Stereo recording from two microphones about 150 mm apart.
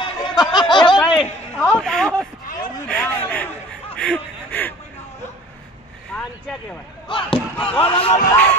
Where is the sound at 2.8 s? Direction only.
10° left (ahead or behind).